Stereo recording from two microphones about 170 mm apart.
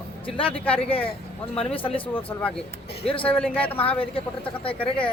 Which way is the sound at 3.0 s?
30° left (ahead or behind).